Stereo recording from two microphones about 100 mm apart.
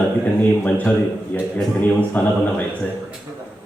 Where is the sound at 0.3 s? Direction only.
15° left (ahead or behind).